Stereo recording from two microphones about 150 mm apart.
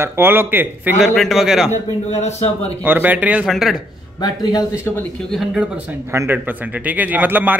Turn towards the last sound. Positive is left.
turn(degrees=-10)  # may be behind; listen again after turning